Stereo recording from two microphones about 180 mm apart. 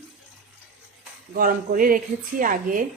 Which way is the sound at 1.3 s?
50° right (ahead or behind).